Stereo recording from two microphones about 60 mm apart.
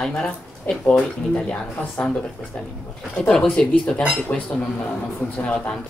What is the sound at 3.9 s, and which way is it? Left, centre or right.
Speech, centre.